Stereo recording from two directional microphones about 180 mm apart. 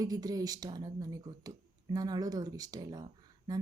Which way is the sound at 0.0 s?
20° right (ahead or behind).